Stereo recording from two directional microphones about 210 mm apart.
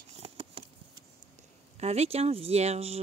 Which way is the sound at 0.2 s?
30° right (ahead or behind).